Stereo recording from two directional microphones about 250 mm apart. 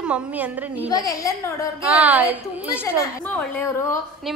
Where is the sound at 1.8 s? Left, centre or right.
Centre.